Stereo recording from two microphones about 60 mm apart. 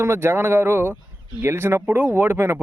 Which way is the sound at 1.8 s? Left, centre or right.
Right.